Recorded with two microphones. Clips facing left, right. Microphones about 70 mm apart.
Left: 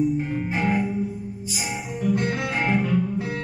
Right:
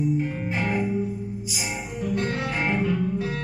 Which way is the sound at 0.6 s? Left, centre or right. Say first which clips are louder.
Left 1 dB; centre.